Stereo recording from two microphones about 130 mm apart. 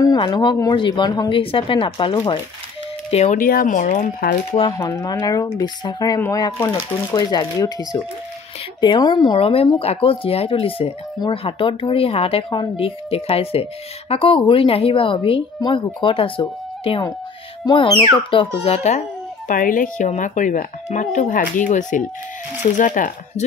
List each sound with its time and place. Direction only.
0.0 s speech: 30° left (ahead or behind)
1.4 s speech: 45° left (ahead or behind)
3.1 s speech: 60° left (ahead or behind); by 4.1 s 75° left (ahead or behind)
4.7 s a child's voice: 25° left (ahead or behind); by 23.4 s 85° left